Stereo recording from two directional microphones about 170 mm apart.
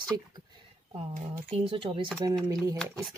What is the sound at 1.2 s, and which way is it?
Speech, 45° right (ahead or behind).